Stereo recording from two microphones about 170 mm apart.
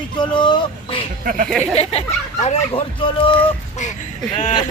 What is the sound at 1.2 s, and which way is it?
Speech, 55° right (ahead or behind).